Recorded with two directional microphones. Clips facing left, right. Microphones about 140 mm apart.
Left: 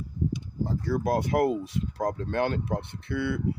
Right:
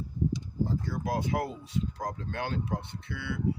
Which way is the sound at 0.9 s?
60° left (ahead or behind).